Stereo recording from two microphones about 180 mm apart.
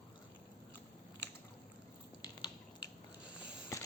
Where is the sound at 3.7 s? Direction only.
15° left (ahead or behind).